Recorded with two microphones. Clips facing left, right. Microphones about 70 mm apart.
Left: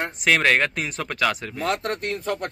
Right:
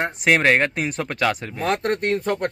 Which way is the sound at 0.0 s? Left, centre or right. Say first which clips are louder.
Right 2 dB; right.